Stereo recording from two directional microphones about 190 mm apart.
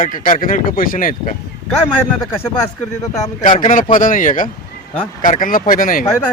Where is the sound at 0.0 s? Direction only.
45° left (ahead or behind).